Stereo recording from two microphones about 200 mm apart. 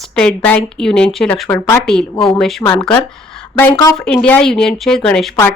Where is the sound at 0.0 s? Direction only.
5° left (ahead or behind).